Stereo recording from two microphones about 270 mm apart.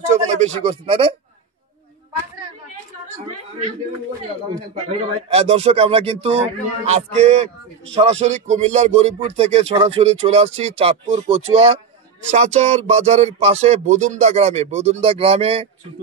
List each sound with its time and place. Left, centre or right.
0.1 s speech: right
4.8 s speech: right